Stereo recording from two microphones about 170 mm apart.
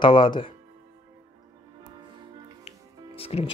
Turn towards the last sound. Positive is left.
turn(degrees=35)  # may be behind; listen again after turning